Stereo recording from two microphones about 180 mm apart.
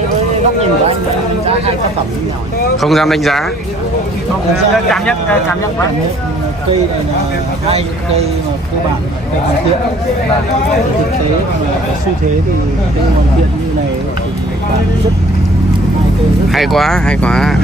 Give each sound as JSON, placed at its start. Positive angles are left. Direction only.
{"t": 2.8, "sound": "speech", "side_deg": 0}
{"t": 4.9, "sound": "speech", "side_deg": 5}
{"t": 7.6, "sound": "speech", "side_deg": -35}
{"t": 16.4, "sound": "speech", "side_deg": 0}